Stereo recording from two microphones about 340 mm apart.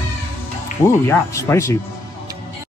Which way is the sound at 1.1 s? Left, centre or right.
Centre.